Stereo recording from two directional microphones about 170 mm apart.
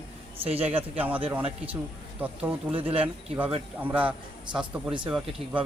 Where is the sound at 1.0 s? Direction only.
10° right (ahead or behind).